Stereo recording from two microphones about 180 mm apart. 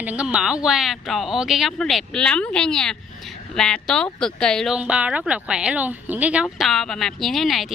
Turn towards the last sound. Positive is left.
turn(degrees=0)  # may be behind; listen again after turning